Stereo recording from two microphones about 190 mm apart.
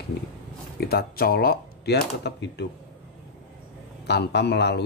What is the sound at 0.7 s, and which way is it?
Speech, 55° left (ahead or behind).